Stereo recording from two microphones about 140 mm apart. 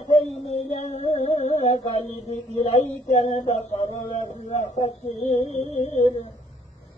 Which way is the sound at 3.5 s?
50° left (ahead or behind).